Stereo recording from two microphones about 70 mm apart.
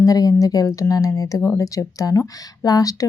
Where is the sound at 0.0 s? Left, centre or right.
Left.